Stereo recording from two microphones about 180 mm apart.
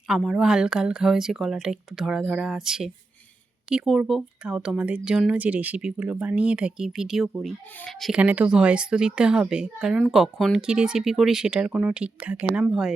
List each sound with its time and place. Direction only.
0.1 s speech: centre (ahead or behind)